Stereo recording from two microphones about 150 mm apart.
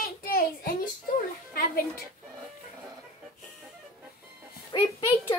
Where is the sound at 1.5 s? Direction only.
75° left (ahead or behind).